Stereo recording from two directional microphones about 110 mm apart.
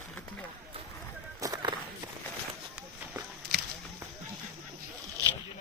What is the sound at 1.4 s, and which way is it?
Walk, 30° right (ahead or behind).